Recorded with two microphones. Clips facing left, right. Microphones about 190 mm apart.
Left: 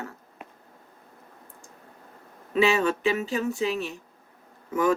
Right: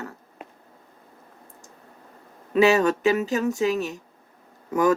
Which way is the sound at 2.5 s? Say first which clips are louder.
Right 4 dB; 40° right (ahead or behind).